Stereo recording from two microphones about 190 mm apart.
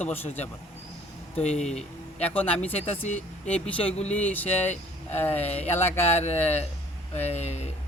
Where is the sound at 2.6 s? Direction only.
35° left (ahead or behind).